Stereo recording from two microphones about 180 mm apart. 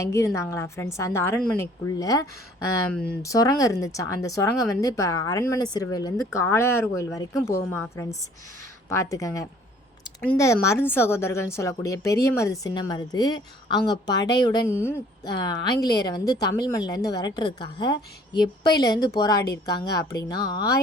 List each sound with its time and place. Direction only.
0.0 s a woman's voice: 15° left (ahead or behind)
3.2 s a woman's voice: 20° left (ahead or behind)